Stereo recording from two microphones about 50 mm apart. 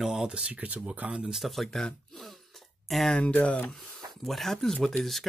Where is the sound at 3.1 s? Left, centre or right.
Left.